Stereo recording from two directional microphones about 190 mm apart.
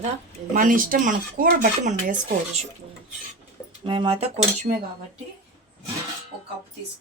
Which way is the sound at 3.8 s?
25° right (ahead or behind).